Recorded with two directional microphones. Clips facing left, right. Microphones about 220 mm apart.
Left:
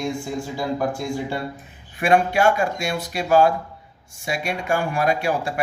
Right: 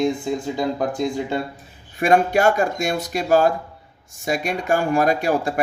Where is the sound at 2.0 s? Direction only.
40° right (ahead or behind).